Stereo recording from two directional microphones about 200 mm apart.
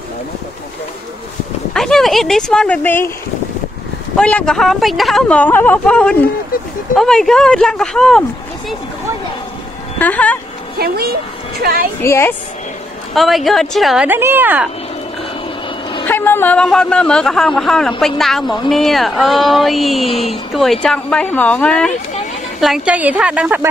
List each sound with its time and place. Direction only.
1.7 s speech: centre (ahead or behind)
4.2 s speech: 5° left (ahead or behind)
9.9 s speech: 5° left (ahead or behind)
10.8 s speech: 50° right (ahead or behind)
12.0 s a woman's voice: 15° left (ahead or behind)
13.1 s speech: centre (ahead or behind)
16.1 s a woman's voice: 10° left (ahead or behind); by 23.7 s 5° right (ahead or behind)